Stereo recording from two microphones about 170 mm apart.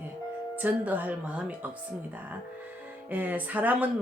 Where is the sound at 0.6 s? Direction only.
10° right (ahead or behind).